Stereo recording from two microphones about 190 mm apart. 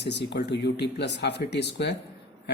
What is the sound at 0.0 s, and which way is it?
Speech, 60° left (ahead or behind).